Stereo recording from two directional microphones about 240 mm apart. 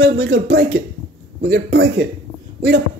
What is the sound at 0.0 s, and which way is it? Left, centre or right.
Speech, right.